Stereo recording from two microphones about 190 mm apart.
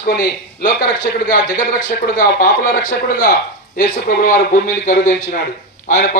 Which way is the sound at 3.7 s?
45° left (ahead or behind).